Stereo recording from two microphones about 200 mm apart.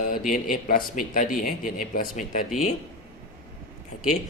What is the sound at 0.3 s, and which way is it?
Speech, 40° left (ahead or behind).